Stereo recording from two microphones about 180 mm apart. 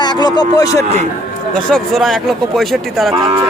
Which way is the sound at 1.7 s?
Centre (ahead or behind).